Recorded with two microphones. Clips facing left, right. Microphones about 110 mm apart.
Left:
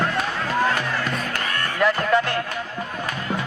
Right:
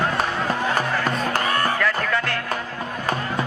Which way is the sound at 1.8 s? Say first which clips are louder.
Left 4 dB; 20° left (ahead or behind).